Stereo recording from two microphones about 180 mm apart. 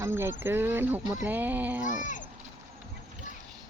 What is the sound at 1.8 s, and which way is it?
Speech, 45° left (ahead or behind).